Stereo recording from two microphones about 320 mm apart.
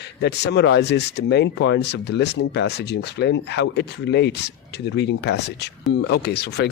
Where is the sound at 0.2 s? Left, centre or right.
Left.